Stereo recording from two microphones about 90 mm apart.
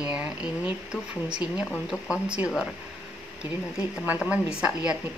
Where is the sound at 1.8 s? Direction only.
5° right (ahead or behind).